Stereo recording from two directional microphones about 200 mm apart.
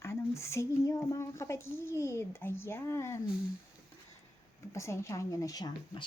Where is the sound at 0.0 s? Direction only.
15° left (ahead or behind).